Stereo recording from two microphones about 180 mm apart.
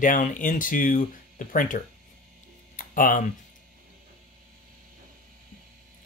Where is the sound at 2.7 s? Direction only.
50° left (ahead or behind).